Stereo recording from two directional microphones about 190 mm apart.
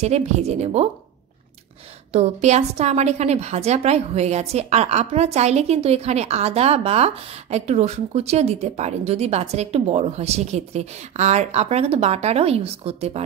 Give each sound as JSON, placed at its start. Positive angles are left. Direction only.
{"t": 0.0, "sound": "a woman's voice", "side_deg": -35}
{"t": 2.1, "sound": "a woman's voice", "side_deg": -35}